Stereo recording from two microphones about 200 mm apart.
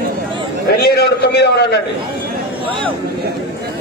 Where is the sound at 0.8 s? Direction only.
55° left (ahead or behind).